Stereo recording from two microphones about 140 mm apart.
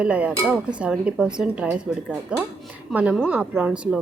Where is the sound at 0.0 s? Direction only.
10° right (ahead or behind).